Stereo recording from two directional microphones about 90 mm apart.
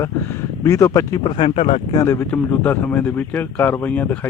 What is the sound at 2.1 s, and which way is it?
Speech, 25° left (ahead or behind).